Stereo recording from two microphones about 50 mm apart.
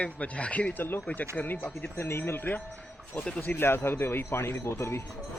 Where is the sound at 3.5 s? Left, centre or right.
Left.